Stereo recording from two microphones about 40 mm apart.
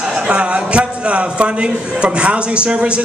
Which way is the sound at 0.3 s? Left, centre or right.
Right.